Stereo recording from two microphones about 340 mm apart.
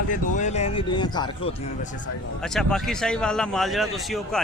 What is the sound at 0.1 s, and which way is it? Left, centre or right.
Speech, left.